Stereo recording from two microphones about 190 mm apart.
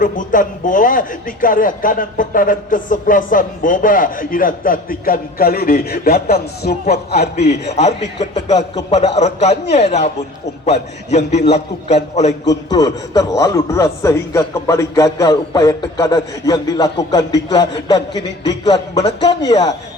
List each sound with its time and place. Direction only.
0.0 s a man's voice: 45° left (ahead or behind)
7.1 s a man's voice: 35° left (ahead or behind)
11.3 s a man's voice: 35° left (ahead or behind)
12.7 s a man's voice: 20° left (ahead or behind)